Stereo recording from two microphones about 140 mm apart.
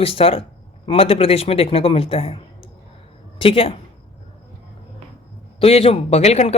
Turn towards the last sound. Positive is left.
turn(degrees=55)  # may be behind; listen again after turning